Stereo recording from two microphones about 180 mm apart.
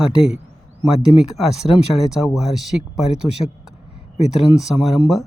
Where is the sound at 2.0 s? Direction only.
Centre (ahead or behind).